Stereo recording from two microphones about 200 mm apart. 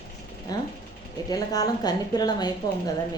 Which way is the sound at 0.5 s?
20° left (ahead or behind).